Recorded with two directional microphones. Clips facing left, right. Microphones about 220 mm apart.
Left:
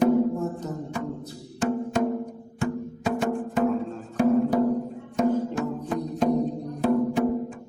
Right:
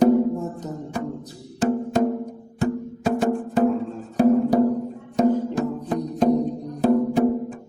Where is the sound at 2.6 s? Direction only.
35° right (ahead or behind).